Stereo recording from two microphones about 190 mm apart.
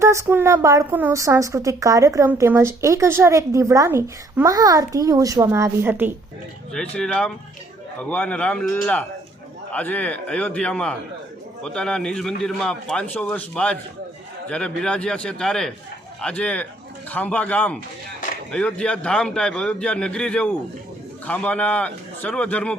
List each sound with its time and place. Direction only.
0.0 s a woman's voice: 15° right (ahead or behind)
6.7 s a man's voice: 5° left (ahead or behind)